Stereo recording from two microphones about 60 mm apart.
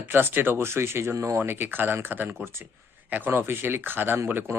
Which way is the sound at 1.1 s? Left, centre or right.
Right.